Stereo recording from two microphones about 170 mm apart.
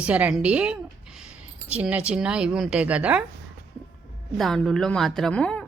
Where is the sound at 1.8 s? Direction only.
10° right (ahead or behind).